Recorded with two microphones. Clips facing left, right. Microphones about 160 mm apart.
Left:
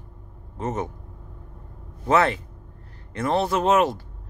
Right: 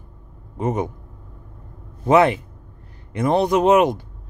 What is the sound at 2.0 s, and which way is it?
Speech, 15° right (ahead or behind).